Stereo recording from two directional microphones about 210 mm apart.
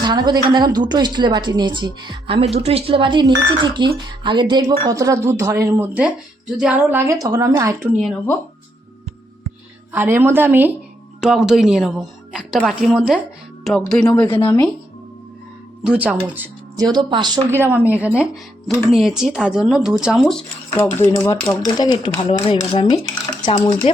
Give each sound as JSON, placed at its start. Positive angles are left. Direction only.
{"t": 0.0, "sound": "a woman's voice", "side_deg": -20}
{"t": 7.9, "sound": "speech", "side_deg": 5}
{"t": 9.9, "sound": "speech", "side_deg": -10}
{"t": 15.8, "sound": "speech", "side_deg": -5}
{"t": 16.9, "sound": "speech", "side_deg": -20}
{"t": 21.8, "sound": "speech", "side_deg": 20}